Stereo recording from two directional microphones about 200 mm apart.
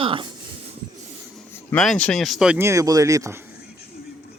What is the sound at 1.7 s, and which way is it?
Speech, 5° left (ahead or behind).